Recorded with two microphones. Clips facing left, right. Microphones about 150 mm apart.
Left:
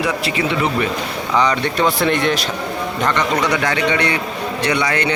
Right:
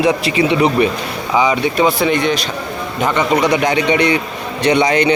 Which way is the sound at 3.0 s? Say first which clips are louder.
Right 4 dB; 10° right (ahead or behind).